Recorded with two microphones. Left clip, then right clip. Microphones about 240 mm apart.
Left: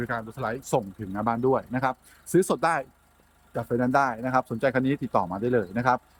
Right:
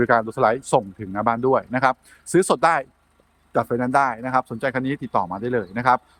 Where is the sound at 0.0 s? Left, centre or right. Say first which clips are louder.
Right 13 dB; centre.